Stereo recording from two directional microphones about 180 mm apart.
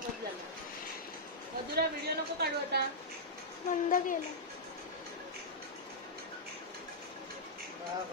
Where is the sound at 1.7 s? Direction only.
60° right (ahead or behind).